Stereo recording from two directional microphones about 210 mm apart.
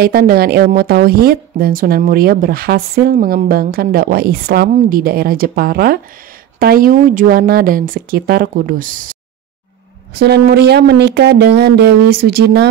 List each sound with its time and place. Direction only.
0.0 s speech: 45° right (ahead or behind)